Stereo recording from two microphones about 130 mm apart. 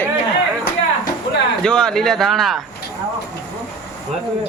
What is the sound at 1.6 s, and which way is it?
Speech, 5° left (ahead or behind).